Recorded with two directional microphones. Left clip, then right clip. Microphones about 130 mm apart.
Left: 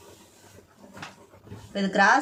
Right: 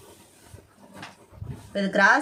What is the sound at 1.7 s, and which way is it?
Speech, 25° right (ahead or behind).